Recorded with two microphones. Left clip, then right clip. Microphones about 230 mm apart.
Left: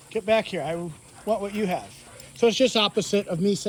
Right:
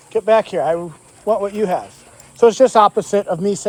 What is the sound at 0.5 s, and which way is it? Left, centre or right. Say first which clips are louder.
Speech: right 11 dB; right.